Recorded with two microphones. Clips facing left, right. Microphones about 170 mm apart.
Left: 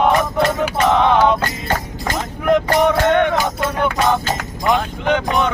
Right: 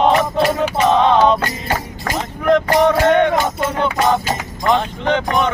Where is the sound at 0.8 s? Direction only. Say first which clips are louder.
Right 1 dB; 20° right (ahead or behind).